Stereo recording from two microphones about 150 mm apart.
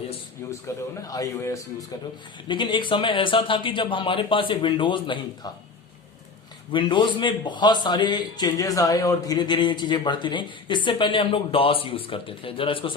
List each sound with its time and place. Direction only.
0.7 s speech: 20° left (ahead or behind)
2.5 s a man's voice: 30° left (ahead or behind)
6.7 s a man's voice: 30° left (ahead or behind)